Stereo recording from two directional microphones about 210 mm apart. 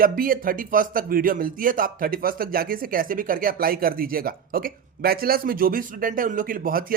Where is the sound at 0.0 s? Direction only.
45° right (ahead or behind).